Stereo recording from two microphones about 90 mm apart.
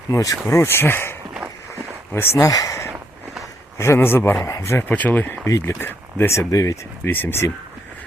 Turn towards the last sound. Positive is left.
turn(degrees=25)  # may be behind; listen again after turning